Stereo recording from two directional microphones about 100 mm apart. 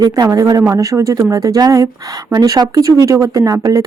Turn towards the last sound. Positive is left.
turn(degrees=-35)  # may be behind; listen again after turning